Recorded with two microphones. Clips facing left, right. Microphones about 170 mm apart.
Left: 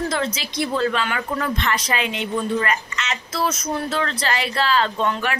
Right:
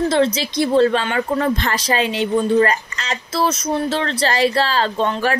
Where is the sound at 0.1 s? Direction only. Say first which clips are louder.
Right 8 dB; 30° right (ahead or behind).